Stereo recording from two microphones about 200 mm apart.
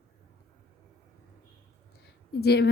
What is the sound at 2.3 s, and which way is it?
Speech, 55° left (ahead or behind).